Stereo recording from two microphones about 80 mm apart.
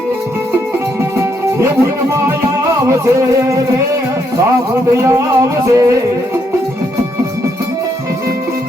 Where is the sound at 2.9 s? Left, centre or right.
Right.